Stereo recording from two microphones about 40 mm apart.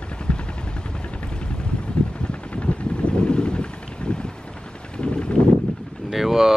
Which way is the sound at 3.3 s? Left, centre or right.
Left.